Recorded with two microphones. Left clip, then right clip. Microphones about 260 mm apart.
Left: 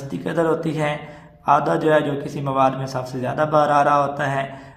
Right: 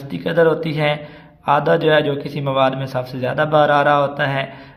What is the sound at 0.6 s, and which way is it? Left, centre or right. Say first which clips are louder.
A man's voice: right 4 dB; right.